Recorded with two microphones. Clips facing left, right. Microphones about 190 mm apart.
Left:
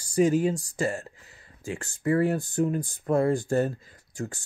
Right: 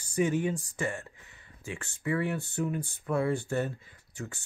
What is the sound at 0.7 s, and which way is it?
Speech, 25° left (ahead or behind).